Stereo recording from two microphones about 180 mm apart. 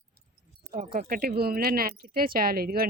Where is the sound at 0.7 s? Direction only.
50° right (ahead or behind).